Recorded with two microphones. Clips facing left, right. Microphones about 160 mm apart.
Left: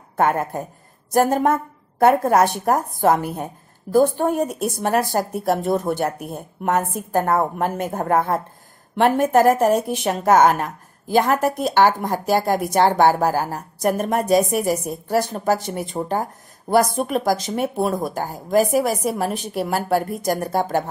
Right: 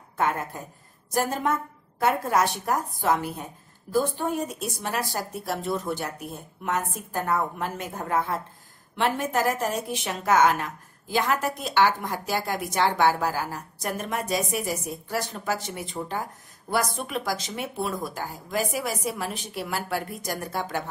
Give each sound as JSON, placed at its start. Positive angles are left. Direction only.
{"t": 0.2, "sound": "a woman's voice", "side_deg": 50}